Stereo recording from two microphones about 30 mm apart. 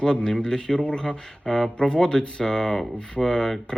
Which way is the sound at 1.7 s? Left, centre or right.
Left.